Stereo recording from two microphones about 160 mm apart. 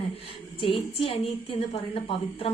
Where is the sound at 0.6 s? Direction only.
35° left (ahead or behind).